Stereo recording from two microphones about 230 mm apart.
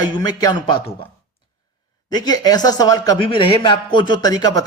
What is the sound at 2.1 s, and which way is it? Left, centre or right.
Speech, centre.